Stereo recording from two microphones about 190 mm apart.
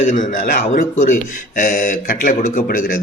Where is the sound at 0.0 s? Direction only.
40° left (ahead or behind).